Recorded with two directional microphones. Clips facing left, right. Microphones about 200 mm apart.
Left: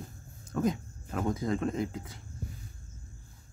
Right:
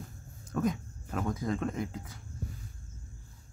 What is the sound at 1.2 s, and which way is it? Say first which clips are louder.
Speech: left 3 dB; 25° left (ahead or behind).